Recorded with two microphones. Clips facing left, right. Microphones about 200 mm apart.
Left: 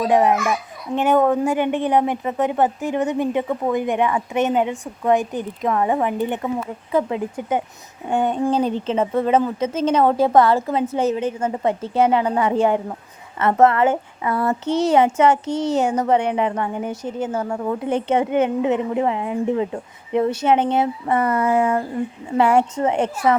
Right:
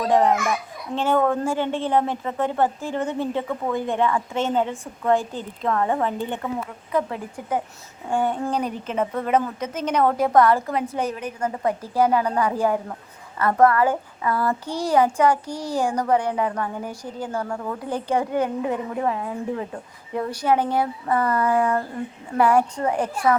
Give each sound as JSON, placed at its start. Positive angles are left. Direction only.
{"t": 0.0, "sound": "a woman's voice", "side_deg": 15}